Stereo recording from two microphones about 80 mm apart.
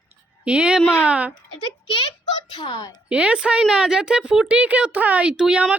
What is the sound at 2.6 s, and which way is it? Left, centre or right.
Speech, left.